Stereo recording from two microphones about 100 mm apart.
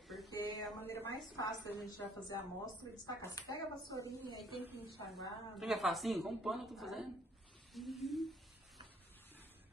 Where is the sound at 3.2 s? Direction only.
35° left (ahead or behind).